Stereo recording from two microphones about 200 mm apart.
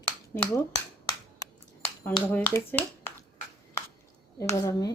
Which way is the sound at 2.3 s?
10° left (ahead or behind).